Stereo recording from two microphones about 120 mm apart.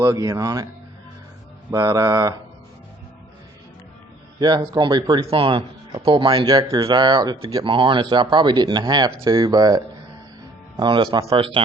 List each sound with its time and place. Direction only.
0.0 s a man's voice: 30° right (ahead or behind)
1.7 s speech: 30° right (ahead or behind)
4.4 s speech: 35° right (ahead or behind)
5.3 s speech: 50° right (ahead or behind)